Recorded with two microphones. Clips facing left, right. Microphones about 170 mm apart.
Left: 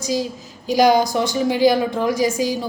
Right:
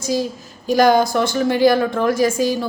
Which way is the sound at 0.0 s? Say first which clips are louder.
Right 2 dB; 15° left (ahead or behind).